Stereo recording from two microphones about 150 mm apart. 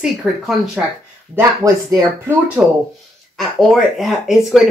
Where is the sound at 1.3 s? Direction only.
20° right (ahead or behind).